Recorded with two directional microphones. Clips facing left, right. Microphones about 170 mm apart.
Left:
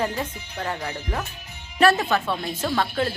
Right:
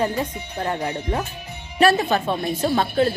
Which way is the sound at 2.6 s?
25° right (ahead or behind).